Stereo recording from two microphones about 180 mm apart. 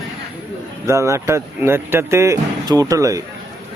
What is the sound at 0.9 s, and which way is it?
Speech, 15° right (ahead or behind).